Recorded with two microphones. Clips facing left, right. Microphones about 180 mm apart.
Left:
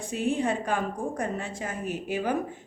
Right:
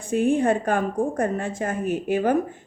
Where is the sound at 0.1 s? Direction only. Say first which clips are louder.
Right 7 dB; 50° right (ahead or behind).